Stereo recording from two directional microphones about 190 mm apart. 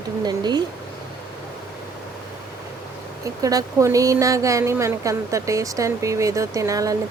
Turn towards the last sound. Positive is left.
turn(degrees=-15)  # may be behind; listen again after turning